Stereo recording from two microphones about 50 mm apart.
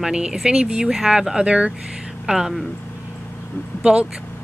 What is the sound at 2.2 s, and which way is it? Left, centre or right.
Speech, centre.